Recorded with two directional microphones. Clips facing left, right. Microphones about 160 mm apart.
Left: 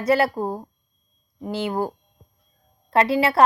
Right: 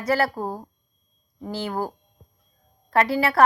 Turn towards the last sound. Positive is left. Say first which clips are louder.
# left 2 dB
turn(degrees=20)  # may be behind; listen again after turning